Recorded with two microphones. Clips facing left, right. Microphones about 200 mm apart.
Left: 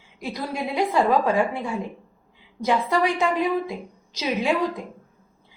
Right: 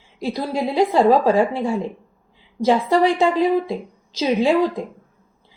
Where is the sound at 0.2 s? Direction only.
30° right (ahead or behind).